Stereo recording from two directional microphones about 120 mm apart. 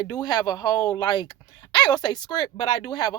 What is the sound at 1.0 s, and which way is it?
Speech, 40° left (ahead or behind).